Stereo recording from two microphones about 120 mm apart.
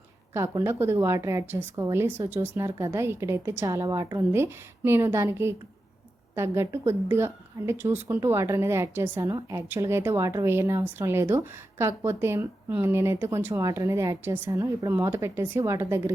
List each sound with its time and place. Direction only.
0.3 s a woman's voice: 20° right (ahead or behind)